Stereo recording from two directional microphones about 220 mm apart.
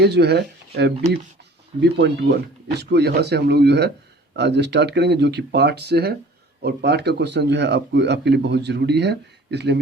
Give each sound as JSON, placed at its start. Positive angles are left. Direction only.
{"t": 0.0, "sound": "speech", "side_deg": -50}